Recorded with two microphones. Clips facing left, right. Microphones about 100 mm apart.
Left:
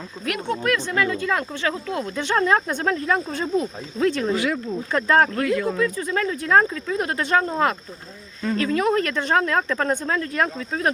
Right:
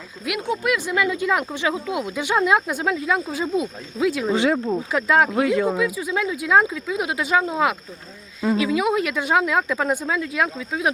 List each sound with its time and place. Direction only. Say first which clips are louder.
0.3 s speech: even; 10° right (ahead or behind)
4.3 s speech: right 3 dB; 25° right (ahead or behind)
4.5 s speech: right 5 dB; 40° right (ahead or behind)
4.9 s speech: left 1 dB; 5° right (ahead or behind)